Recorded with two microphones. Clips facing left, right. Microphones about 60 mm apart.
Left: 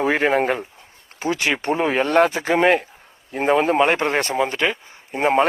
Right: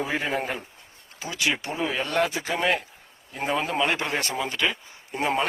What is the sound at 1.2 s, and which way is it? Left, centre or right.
Speech, left.